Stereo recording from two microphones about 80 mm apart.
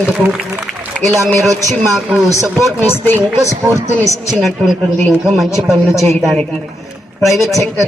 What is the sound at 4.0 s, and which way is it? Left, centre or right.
Speech, centre.